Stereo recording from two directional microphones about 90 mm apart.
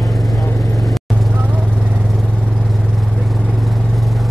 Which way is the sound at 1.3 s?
15° right (ahead or behind).